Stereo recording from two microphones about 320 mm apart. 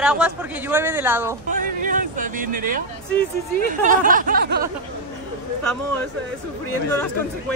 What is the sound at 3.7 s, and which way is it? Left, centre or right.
Speech, right.